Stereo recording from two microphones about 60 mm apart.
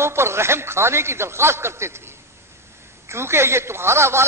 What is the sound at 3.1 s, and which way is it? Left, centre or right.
A man's voice, right.